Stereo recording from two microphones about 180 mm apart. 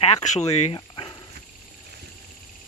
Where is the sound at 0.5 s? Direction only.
30° left (ahead or behind).